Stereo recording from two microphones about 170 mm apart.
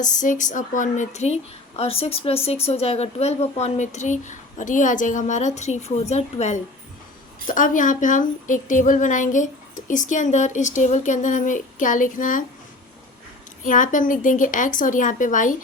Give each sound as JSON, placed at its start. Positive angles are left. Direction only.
{"t": 0.0, "sound": "a woman's voice", "side_deg": 50}
{"t": 13.7, "sound": "a woman's voice", "side_deg": 50}